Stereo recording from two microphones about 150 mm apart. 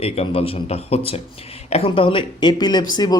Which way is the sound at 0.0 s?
40° left (ahead or behind).